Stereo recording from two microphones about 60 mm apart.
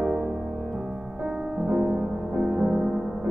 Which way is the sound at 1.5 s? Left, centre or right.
Centre.